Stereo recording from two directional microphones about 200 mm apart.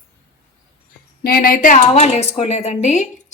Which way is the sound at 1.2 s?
45° left (ahead or behind).